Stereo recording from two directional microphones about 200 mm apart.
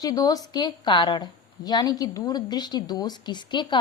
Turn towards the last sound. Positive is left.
turn(degrees=20)  # may be behind; listen again after turning